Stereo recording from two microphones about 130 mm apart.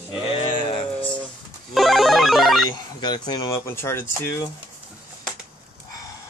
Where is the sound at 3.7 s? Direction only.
20° left (ahead or behind).